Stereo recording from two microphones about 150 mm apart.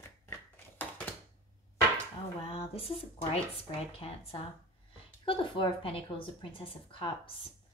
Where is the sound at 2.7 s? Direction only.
40° left (ahead or behind).